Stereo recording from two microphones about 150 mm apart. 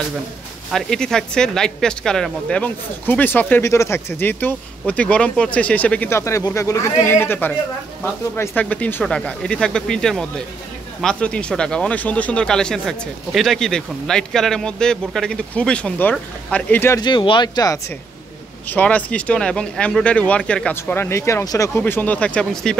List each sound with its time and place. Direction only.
0.7 s speech: centre (ahead or behind)
17.0 s speech: 30° left (ahead or behind)
18.7 s speech: 10° left (ahead or behind)